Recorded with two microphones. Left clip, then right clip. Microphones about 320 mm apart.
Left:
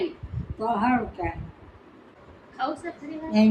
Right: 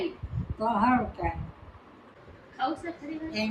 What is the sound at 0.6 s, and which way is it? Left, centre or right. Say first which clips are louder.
Speech: left 1 dB; centre.